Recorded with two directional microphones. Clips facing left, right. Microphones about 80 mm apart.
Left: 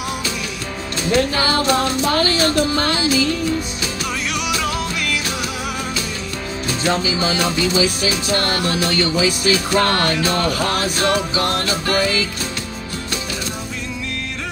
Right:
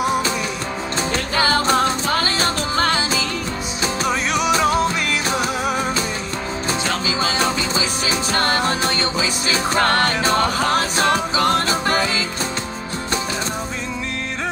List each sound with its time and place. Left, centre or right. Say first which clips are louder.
0.0 s music: right 5 dB; right
6.7 s music: left 4 dB; right